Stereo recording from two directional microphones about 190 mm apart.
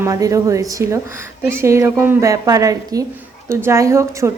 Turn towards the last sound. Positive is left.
turn(degrees=-15)  # may be behind; listen again after turning